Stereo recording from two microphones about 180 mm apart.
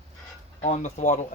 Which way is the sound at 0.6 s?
40° left (ahead or behind).